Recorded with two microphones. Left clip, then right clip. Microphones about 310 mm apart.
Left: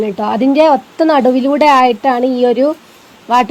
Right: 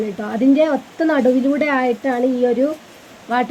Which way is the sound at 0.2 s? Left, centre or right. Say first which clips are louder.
Left 5 dB; left.